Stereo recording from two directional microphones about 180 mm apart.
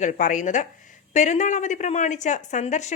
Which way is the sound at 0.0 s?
45° left (ahead or behind).